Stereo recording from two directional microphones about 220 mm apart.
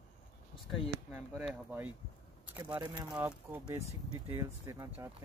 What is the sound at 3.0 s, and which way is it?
Speech, 5° right (ahead or behind).